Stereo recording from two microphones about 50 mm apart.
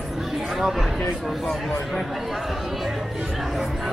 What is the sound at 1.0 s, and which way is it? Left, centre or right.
Speech, centre.